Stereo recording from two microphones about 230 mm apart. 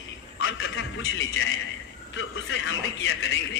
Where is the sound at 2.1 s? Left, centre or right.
Left.